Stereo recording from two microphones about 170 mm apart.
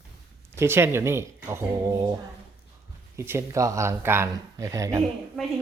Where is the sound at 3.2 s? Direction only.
15° right (ahead or behind).